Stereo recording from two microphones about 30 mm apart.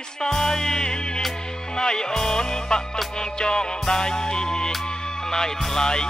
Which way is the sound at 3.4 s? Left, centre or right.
Left.